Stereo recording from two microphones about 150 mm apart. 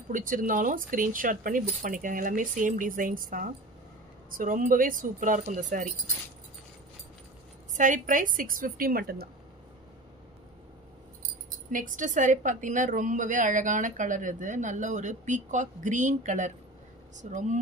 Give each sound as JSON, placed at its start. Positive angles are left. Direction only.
{"t": 0.1, "sound": "a woman's voice", "side_deg": -65}
{"t": 7.7, "sound": "a woman's voice", "side_deg": -60}
{"t": 11.7, "sound": "a woman's voice", "side_deg": -60}